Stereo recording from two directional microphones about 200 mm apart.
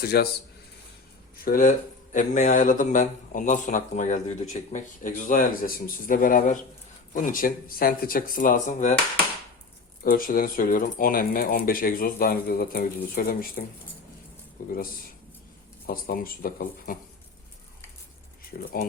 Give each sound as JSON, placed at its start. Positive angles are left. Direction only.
{"t": 0.0, "sound": "speech", "side_deg": 50}
{"t": 1.5, "sound": "speech", "side_deg": 45}
{"t": 10.0, "sound": "speech", "side_deg": 45}
{"t": 14.6, "sound": "speech", "side_deg": 45}
{"t": 15.9, "sound": "speech", "side_deg": 45}
{"t": 18.5, "sound": "speech", "side_deg": 45}